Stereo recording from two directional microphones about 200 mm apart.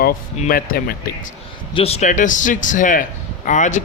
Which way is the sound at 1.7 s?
30° left (ahead or behind).